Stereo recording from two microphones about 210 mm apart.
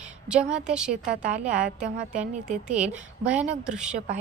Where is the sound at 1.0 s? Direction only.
35° right (ahead or behind).